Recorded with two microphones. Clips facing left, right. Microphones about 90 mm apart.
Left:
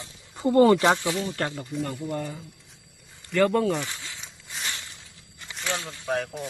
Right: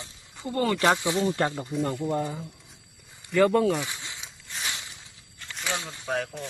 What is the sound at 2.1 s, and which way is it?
Speech, 20° right (ahead or behind).